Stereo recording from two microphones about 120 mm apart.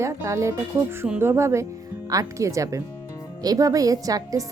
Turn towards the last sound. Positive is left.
turn(degrees=-30)  # may be behind; listen again after turning